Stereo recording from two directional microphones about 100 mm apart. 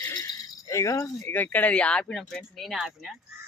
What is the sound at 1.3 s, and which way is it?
A woman's voice, 20° left (ahead or behind).